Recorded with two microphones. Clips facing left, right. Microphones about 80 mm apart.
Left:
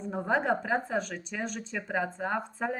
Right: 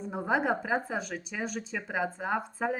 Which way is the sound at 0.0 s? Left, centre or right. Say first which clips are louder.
Even; centre.